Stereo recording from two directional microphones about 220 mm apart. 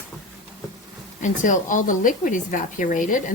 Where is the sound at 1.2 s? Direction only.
35° left (ahead or behind).